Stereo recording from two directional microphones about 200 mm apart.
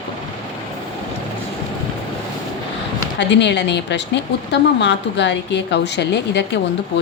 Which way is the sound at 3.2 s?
60° left (ahead or behind).